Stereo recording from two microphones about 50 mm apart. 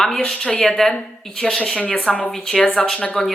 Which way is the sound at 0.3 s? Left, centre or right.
Centre.